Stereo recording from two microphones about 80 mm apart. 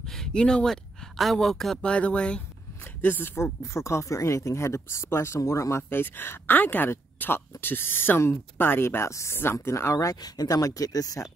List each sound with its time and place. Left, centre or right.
0.1 s speech: centre
1.9 s speech: centre
3.0 s speech: left